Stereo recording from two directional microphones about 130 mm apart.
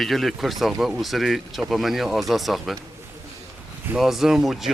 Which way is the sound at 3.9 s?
Centre (ahead or behind).